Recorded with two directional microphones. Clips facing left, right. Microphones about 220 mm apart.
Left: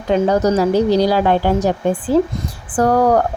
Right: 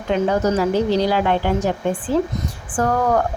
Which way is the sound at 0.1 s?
40° left (ahead or behind).